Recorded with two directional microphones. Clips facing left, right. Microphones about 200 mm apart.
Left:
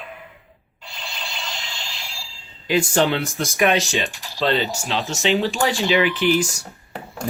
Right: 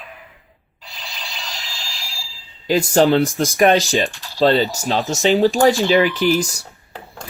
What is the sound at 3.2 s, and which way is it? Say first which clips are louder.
Speech: right 5 dB; centre (ahead or behind).